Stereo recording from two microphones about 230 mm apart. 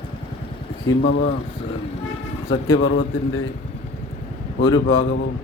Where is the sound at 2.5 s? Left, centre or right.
Left.